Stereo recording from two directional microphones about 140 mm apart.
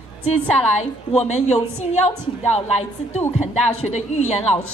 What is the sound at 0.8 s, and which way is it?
A woman's voice, 50° left (ahead or behind).